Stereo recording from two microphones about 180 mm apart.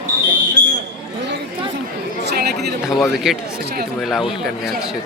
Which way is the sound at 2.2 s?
65° right (ahead or behind).